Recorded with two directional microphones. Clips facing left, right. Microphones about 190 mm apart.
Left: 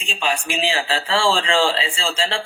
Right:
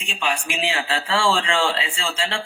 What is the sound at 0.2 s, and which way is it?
Speech, 30° left (ahead or behind).